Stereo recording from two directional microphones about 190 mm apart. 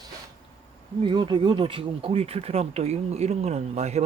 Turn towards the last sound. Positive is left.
turn(degrees=-35)  # may be behind; listen again after turning